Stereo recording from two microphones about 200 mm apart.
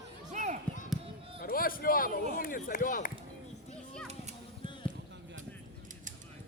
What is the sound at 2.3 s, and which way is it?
Chop, 45° left (ahead or behind).